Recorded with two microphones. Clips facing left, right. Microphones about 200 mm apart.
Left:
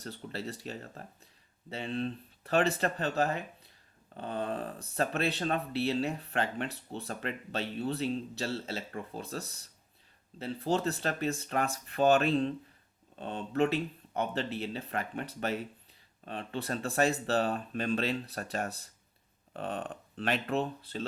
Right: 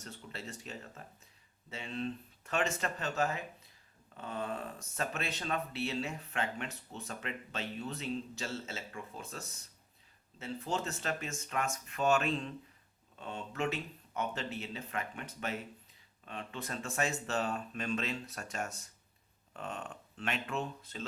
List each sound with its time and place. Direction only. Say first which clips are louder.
0.0 s speech: left 7 dB; 35° left (ahead or behind)